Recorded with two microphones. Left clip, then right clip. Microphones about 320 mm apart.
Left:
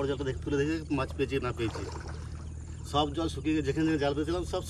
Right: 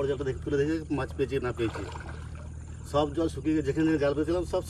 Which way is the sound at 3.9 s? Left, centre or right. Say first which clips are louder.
Right 3 dB; centre.